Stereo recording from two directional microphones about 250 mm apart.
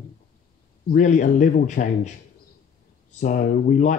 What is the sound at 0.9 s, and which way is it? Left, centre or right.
Speech, left.